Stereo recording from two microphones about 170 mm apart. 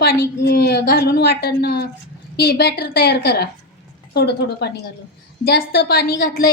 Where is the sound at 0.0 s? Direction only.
70° left (ahead or behind).